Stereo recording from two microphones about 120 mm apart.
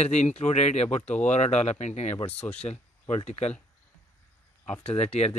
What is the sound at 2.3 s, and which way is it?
Speech, 15° left (ahead or behind).